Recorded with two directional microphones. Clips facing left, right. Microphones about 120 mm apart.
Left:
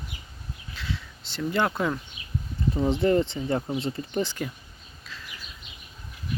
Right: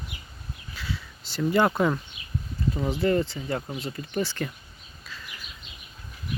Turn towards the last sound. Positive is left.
turn(degrees=0)  # may be behind; listen again after turning